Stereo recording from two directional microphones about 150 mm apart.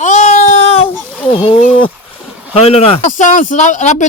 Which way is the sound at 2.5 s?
40° left (ahead or behind).